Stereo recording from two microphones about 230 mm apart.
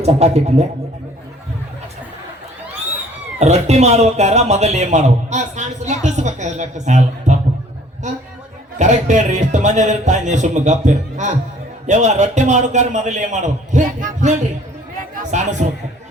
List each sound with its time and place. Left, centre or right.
0.0 s speech: right
3.3 s speech: right
8.8 s a man's voice: right
14.9 s a sound: right